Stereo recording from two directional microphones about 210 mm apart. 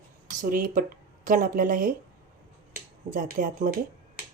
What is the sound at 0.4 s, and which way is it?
Speech, 40° right (ahead or behind).